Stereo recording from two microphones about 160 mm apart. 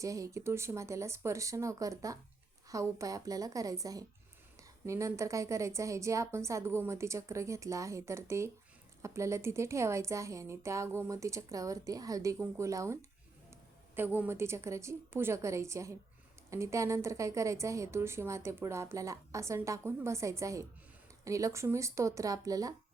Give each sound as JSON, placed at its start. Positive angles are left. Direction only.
{"t": 0.0, "sound": "a woman's voice", "side_deg": -20}